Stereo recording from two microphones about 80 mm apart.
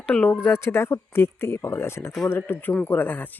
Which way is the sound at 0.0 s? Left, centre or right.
Centre.